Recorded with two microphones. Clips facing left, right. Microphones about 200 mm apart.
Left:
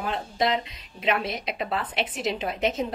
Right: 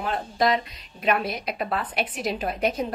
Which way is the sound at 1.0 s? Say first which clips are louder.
Right 2 dB; 25° left (ahead or behind).